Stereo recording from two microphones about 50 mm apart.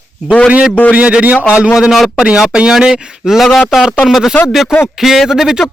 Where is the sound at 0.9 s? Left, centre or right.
Right.